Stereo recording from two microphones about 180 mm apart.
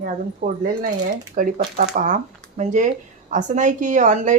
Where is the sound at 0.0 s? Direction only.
50° right (ahead or behind).